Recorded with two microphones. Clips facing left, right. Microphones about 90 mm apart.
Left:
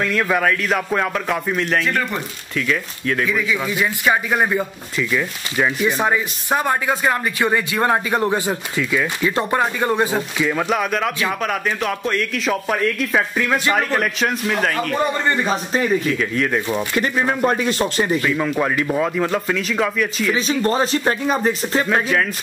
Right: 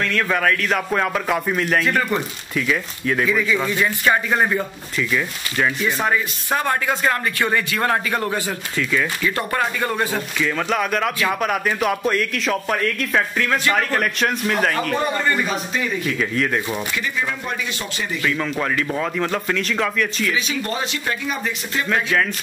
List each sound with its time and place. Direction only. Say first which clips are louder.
0.0 s speech: left 2 dB; 10° left (ahead or behind)
5.9 s speech: left 2 dB; 20° left (ahead or behind)
10.8 s speech: even; centre (ahead or behind)
15.2 s speech: left 2 dB; 30° left (ahead or behind)
16.1 s speech: left 2 dB; centre (ahead or behind)
16.9 s speech: left 5 dB; 45° left (ahead or behind)
18.2 s speech: left 3 dB; 10° left (ahead or behind)
20.3 s speech: left 6 dB; 35° left (ahead or behind)